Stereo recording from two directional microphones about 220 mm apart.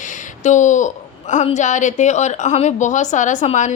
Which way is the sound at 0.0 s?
35° left (ahead or behind).